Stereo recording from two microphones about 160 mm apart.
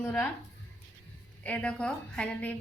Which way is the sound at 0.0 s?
15° left (ahead or behind).